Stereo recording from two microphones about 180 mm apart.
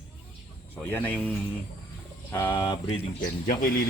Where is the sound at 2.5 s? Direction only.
30° left (ahead or behind).